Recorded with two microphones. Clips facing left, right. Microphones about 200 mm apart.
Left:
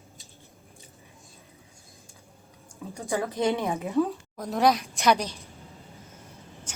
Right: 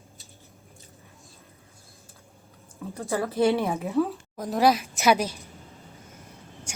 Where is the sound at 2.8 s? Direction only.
15° left (ahead or behind).